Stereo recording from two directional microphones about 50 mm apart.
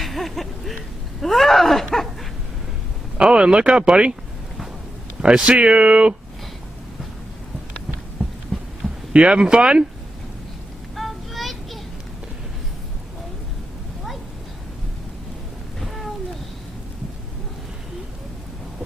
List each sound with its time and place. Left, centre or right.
0.0 s a sound: centre
1.2 s speech: centre
3.2 s speech: centre
5.2 s speech: right
8.2 s heart sounds: centre
9.1 s speech: right
10.9 s child singing: centre